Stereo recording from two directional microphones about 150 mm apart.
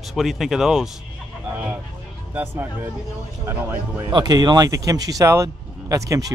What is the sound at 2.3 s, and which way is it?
Speech, 15° right (ahead or behind).